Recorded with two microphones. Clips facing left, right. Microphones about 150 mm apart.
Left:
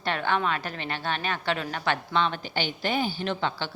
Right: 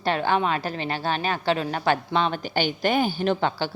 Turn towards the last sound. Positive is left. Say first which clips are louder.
# right 6 dB
turn(degrees=-40)  # may be behind; listen again after turning